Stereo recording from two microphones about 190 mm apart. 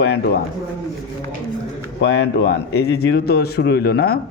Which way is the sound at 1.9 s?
65° left (ahead or behind).